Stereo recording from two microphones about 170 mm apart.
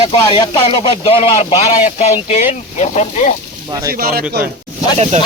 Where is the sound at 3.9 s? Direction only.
60° right (ahead or behind).